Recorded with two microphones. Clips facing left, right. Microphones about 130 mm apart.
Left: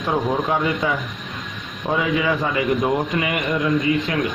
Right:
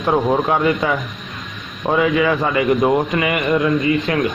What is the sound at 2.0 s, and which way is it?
A man's voice, 65° right (ahead or behind).